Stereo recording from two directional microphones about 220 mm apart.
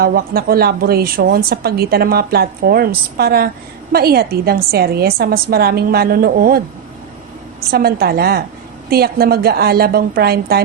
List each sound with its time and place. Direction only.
0.0 s speech: 45° right (ahead or behind)
7.7 s speech: 45° right (ahead or behind)